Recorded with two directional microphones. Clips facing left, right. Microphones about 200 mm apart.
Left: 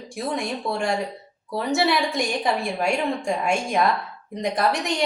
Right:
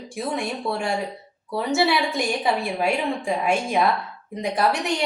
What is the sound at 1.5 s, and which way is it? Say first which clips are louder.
A woman's voice: right 1 dB; centre (ahead or behind).